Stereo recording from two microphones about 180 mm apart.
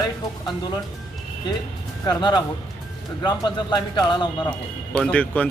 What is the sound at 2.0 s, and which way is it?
Speech, 20° left (ahead or behind).